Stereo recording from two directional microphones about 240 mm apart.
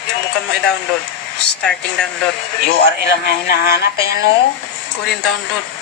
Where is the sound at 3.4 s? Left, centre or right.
Left.